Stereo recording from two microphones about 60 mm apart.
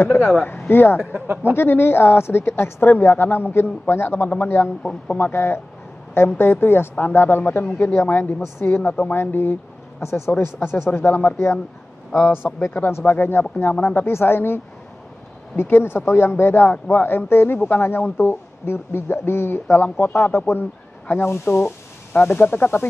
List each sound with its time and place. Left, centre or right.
0.1 s a woman's voice: left
1.2 s speech: right
1.5 s a woman's voice: left
10.0 s speech: left
10.3 s a woman's voice: left
12.4 s speech: centre
12.9 s a woman's voice: left